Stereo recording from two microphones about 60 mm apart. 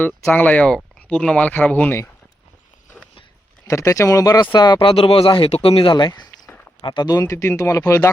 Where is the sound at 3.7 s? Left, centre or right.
Left.